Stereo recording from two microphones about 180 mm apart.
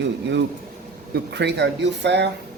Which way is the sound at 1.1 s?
70° right (ahead or behind).